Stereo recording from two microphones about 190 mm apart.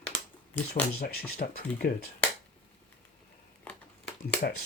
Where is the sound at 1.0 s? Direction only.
50° left (ahead or behind).